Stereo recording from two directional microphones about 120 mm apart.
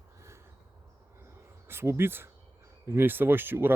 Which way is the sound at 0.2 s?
25° right (ahead or behind).